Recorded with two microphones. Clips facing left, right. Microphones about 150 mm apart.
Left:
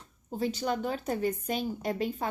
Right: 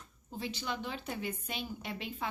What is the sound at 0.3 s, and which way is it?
A woman's voice, 40° left (ahead or behind).